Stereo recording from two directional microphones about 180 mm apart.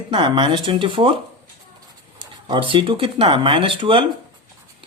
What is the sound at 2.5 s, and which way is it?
Speech, 30° right (ahead or behind).